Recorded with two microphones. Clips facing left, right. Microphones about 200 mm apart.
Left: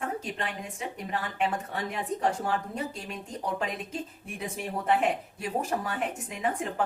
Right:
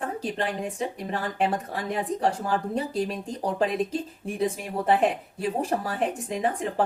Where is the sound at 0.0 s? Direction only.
35° right (ahead or behind).